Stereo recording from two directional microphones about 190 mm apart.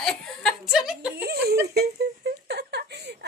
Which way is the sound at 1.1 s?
55° right (ahead or behind).